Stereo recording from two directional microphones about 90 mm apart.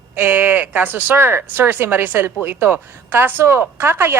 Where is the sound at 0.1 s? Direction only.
20° right (ahead or behind).